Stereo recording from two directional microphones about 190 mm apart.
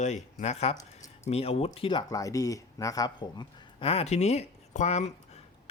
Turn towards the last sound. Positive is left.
turn(degrees=35)  # may be behind; listen again after turning